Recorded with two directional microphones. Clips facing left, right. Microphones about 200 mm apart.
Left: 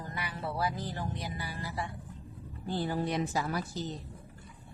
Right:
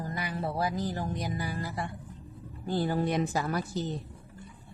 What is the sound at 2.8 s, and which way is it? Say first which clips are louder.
Speech: right 4 dB; 50° right (ahead or behind).